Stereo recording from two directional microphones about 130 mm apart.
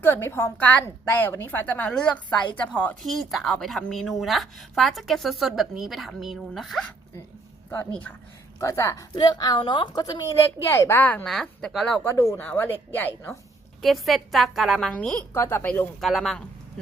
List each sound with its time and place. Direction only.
0.0 s a woman's voice: 20° left (ahead or behind); by 6.8 s centre (ahead or behind)
8.5 s speech: 25° left (ahead or behind)
10.3 s a woman's voice: 20° left (ahead or behind); by 11.9 s 5° left (ahead or behind)
12.0 s a woman's voice: 20° left (ahead or behind)
13.8 s a woman's voice: centre (ahead or behind)
16.0 s a woman's voice: centre (ahead or behind)